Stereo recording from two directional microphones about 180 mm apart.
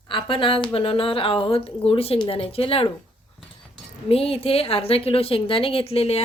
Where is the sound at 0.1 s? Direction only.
30° left (ahead or behind).